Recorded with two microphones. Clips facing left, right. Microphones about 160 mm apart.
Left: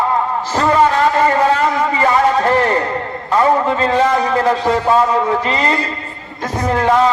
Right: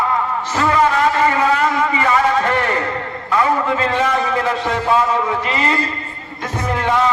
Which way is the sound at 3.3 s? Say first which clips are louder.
Left 3 dB; 35° left (ahead or behind).